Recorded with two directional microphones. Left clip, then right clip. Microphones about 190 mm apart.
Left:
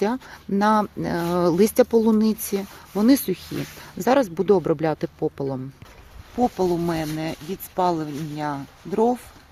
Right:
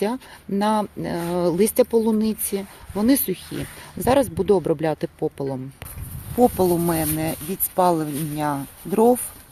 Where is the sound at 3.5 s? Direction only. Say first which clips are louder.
Left 1 dB; 40° left (ahead or behind).